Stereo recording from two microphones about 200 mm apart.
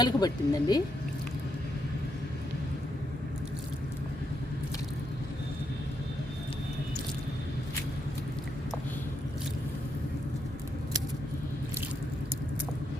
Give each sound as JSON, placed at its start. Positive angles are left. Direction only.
{"t": 0.0, "sound": "speech", "side_deg": 20}